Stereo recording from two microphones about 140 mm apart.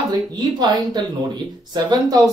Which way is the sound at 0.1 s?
30° right (ahead or behind).